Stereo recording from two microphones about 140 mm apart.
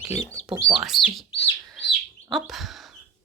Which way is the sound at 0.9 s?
5° right (ahead or behind).